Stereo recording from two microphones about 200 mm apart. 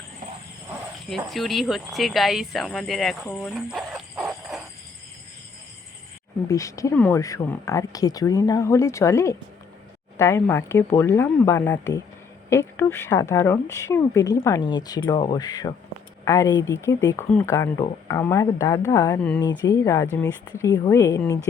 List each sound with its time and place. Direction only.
1.0 s speech: centre (ahead or behind)
3.7 s music: centre (ahead or behind)
6.5 s speech: 15° left (ahead or behind)